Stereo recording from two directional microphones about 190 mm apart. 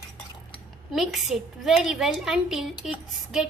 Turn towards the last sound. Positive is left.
turn(degrees=0)  # may be behind; listen again after turning